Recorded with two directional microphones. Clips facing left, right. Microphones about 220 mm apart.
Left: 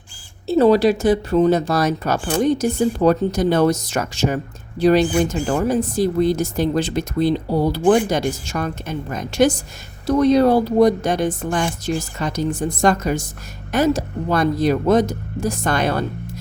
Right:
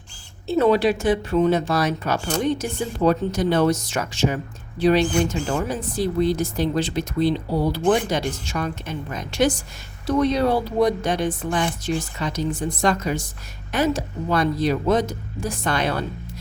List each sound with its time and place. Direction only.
0.4 s speech: 35° left (ahead or behind)